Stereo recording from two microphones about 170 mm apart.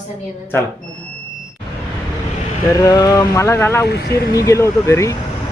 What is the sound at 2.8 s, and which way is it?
Speech, 20° left (ahead or behind).